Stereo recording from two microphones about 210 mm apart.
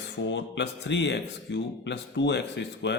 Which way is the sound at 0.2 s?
60° left (ahead or behind).